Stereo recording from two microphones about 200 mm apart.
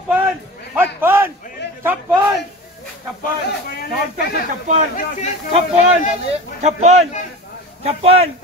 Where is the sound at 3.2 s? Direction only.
50° left (ahead or behind).